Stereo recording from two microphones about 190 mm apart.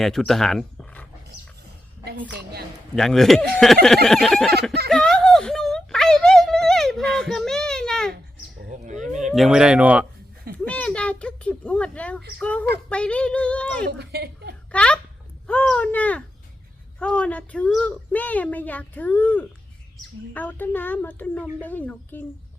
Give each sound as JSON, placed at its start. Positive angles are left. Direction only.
{"t": 0.0, "sound": "speech", "side_deg": 0}
{"t": 2.0, "sound": "a woman's voice", "side_deg": -55}
{"t": 2.9, "sound": "speech", "side_deg": 0}
{"t": 4.9, "sound": "a sound", "side_deg": 5}
{"t": 8.7, "sound": "speech", "side_deg": -40}
{"t": 9.3, "sound": "speech", "side_deg": 0}
{"t": 10.7, "sound": "a child's voice", "side_deg": 5}
{"t": 14.0, "sound": "a woman's voice", "side_deg": -55}
{"t": 14.7, "sound": "a woman's voice", "side_deg": 5}